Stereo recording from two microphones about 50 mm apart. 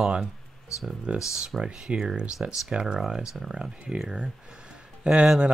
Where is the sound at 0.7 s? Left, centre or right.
Left.